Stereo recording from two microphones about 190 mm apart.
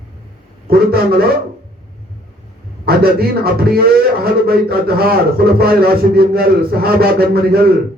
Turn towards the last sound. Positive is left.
turn(degrees=-55)  # may be behind; listen again after turning